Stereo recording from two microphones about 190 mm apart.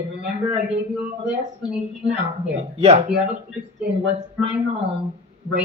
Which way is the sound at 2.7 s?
35° right (ahead or behind).